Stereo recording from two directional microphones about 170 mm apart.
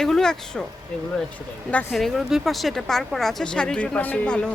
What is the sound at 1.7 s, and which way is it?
Speech, centre (ahead or behind).